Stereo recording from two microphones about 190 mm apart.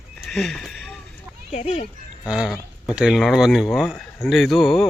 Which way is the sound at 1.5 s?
35° left (ahead or behind).